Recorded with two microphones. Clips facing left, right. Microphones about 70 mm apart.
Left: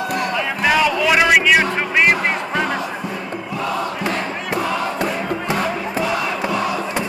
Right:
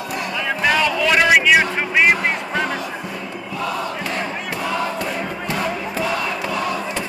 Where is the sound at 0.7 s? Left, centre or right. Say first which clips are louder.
Left 2 dB; centre.